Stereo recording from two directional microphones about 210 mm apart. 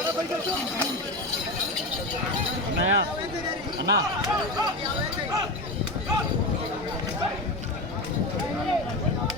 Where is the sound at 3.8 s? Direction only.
55° right (ahead or behind).